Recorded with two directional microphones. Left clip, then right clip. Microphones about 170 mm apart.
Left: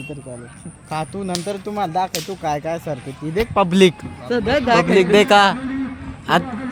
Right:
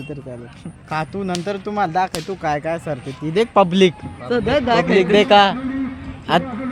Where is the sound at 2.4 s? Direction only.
Centre (ahead or behind).